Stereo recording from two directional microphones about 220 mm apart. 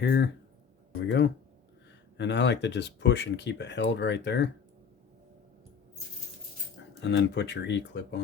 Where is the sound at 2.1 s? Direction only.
50° left (ahead or behind).